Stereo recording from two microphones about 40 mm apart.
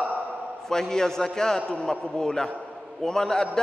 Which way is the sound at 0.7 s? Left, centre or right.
Centre.